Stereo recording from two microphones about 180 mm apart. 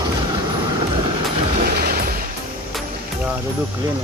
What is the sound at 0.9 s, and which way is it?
Vehicle, 30° right (ahead or behind).